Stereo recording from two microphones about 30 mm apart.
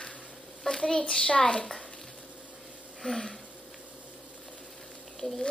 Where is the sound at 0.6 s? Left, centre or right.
Centre.